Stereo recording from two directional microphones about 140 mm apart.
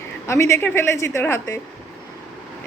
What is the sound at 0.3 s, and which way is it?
A woman's voice, 20° left (ahead or behind).